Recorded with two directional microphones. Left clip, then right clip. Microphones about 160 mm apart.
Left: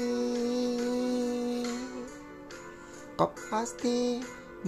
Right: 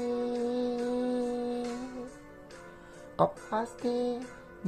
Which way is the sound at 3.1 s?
20° left (ahead or behind).